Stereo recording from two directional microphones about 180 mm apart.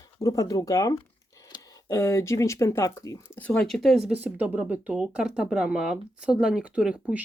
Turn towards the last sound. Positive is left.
turn(degrees=-5)  # may be behind; listen again after turning